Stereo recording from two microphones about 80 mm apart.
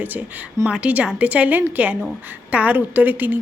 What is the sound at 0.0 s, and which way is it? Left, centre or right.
A woman's voice, right.